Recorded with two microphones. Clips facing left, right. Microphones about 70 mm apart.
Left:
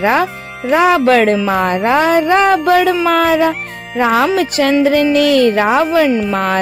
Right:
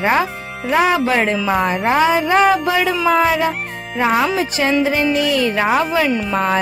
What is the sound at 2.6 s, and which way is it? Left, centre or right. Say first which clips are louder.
Speech: left 5 dB; left.